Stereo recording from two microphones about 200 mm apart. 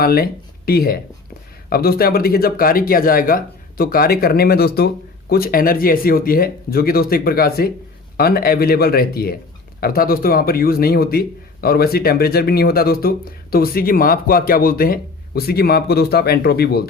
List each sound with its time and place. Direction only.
0.0 s speech: 50° left (ahead or behind)